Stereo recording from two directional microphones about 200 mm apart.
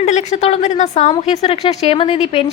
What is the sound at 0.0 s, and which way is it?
A woman's voice, 35° left (ahead or behind).